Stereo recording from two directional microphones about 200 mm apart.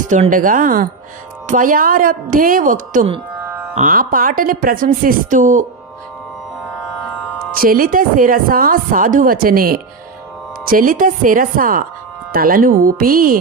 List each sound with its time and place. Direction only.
0.1 s a woman's voice: 40° right (ahead or behind)
7.6 s a woman's voice: 45° right (ahead or behind)